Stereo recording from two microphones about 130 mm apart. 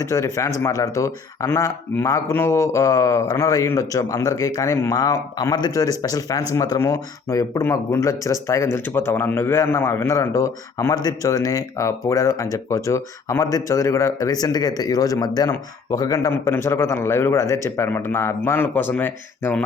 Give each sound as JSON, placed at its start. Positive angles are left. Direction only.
{"t": 0.0, "sound": "speech", "side_deg": 25}